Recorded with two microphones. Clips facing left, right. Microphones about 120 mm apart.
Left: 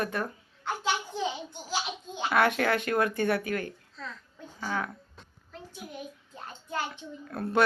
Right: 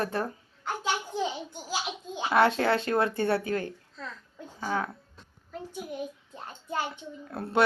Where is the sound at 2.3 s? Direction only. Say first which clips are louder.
Right 2 dB; 25° right (ahead or behind).